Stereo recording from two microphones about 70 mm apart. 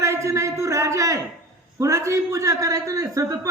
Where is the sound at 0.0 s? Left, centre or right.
Right.